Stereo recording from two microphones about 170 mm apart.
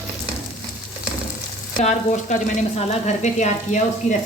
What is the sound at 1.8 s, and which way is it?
Speech, 45° left (ahead or behind).